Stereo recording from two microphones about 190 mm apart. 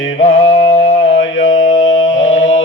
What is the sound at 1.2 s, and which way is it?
Mantra, 80° left.